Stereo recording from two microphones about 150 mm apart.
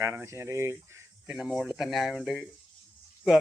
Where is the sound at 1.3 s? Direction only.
5° right (ahead or behind).